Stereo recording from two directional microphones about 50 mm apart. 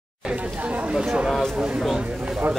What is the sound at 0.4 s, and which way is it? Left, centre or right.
Speech, right.